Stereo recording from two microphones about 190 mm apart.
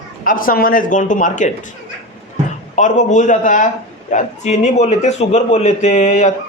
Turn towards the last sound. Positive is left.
turn(degrees=35)  # may be behind; listen again after turning